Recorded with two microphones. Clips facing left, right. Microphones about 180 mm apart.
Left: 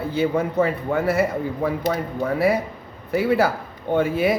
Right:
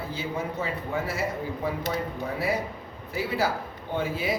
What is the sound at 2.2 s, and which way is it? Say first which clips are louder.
A man's voice: left 11 dB; 60° left (ahead or behind).